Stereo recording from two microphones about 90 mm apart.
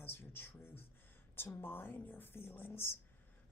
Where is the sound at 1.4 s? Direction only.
20° left (ahead or behind).